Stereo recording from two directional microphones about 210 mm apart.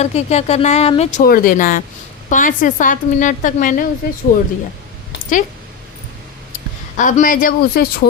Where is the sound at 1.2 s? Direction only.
45° left (ahead or behind).